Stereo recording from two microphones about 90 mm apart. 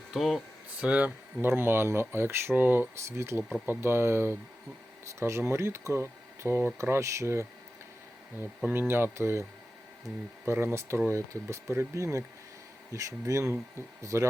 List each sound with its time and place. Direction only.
0.1 s speech: centre (ahead or behind)
0.8 s speech: 15° right (ahead or behind)
1.4 s speech: 25° right (ahead or behind)
8.7 s speech: 25° right (ahead or behind)